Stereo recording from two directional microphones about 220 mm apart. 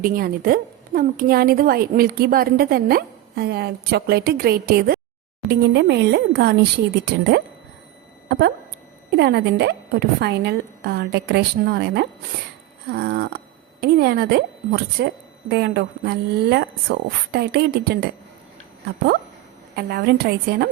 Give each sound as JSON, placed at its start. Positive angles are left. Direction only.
{"t": 0.0, "sound": "a woman's voice", "side_deg": -40}
{"t": 19.7, "sound": "a woman's voice", "side_deg": -45}